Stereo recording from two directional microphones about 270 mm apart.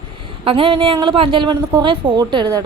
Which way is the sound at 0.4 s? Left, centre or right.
Centre.